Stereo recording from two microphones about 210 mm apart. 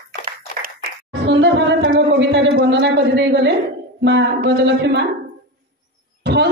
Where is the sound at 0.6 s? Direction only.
55° right (ahead or behind).